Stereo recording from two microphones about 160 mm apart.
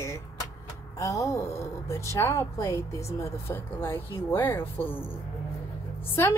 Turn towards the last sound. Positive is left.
turn(degrees=15)  # may be behind; listen again after turning